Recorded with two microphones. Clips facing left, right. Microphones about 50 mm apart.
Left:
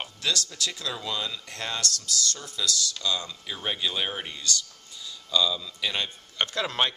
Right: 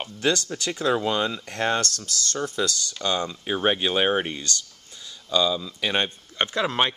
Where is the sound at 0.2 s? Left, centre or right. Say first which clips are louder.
Right 5 dB; right.